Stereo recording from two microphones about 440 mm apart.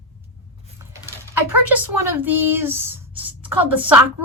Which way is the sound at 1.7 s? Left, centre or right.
Right.